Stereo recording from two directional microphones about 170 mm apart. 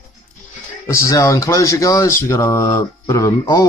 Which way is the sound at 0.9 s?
20° left (ahead or behind).